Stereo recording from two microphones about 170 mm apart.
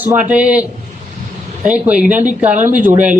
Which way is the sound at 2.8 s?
10° right (ahead or behind).